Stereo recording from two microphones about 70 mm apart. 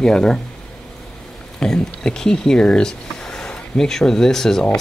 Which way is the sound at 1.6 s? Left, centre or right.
Centre.